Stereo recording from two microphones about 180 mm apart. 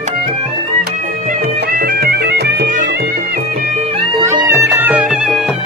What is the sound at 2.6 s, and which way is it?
Music, 45° right (ahead or behind).